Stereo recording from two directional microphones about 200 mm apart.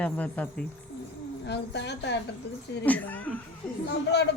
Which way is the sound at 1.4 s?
60° left (ahead or behind).